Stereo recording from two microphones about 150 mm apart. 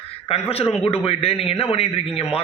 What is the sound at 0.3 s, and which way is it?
A man's voice, 40° left (ahead or behind).